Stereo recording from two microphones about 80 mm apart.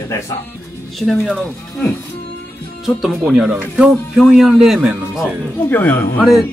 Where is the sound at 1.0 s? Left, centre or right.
Centre.